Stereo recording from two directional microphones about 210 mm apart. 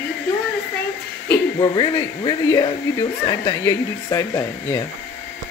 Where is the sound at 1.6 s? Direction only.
20° left (ahead or behind).